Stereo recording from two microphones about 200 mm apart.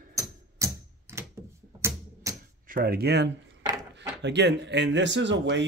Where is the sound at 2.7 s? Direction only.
50° right (ahead or behind).